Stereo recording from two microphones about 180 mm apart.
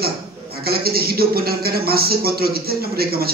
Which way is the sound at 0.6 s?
60° right (ahead or behind).